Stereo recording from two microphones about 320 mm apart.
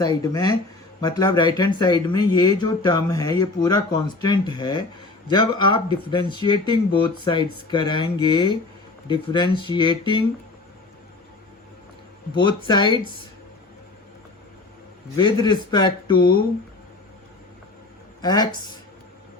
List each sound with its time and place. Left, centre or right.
0.0 s speech: centre
12.4 s speech: centre
15.1 s speech: centre
16.1 s speech: left
18.2 s speech: centre